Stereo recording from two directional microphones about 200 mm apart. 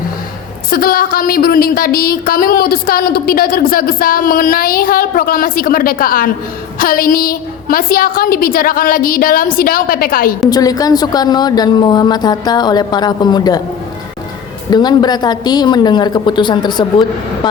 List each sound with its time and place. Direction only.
0.7 s speech: 45° left (ahead or behind)
10.5 s a woman's voice: 20° left (ahead or behind)
14.7 s a woman's voice: 20° left (ahead or behind)